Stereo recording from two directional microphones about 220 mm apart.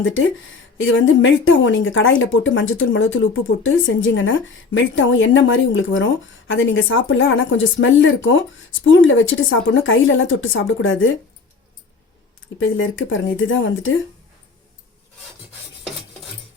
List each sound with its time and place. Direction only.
0.8 s speech: 65° left (ahead or behind)
12.5 s speech: 60° left (ahead or behind)